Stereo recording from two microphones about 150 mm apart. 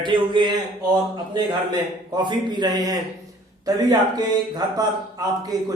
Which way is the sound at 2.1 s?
30° right (ahead or behind).